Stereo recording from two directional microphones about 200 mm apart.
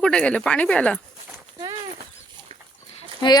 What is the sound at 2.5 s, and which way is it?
Pig, 30° right (ahead or behind).